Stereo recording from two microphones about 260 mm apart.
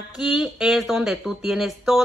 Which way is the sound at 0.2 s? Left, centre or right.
Centre.